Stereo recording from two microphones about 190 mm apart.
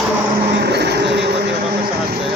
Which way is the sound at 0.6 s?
60° right (ahead or behind).